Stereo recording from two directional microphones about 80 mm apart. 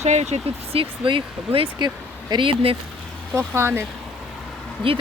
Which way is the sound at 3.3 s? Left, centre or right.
Right.